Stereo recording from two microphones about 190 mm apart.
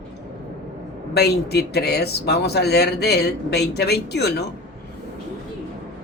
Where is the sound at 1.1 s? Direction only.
60° left (ahead or behind).